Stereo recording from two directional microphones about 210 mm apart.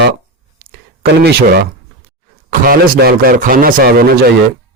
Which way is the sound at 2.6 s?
45° right (ahead or behind).